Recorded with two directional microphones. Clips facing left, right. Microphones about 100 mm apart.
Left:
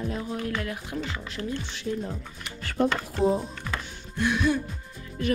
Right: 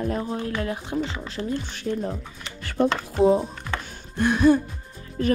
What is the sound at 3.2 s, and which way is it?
Speech, 90° right.